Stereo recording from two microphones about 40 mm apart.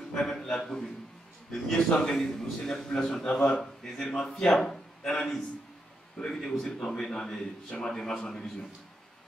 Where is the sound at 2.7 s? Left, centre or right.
Centre.